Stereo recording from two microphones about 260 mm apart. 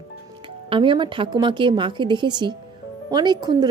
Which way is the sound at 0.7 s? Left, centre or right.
Centre.